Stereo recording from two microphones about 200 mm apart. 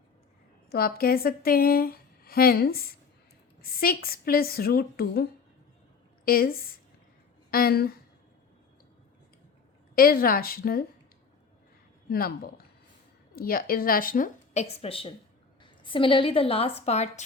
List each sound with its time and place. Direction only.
0.7 s speech: 50° left (ahead or behind)
6.2 s speech: 50° left (ahead or behind)
9.9 s speech: 45° left (ahead or behind)
12.0 s a woman's voice: 50° left (ahead or behind); by 17.2 s 35° left (ahead or behind)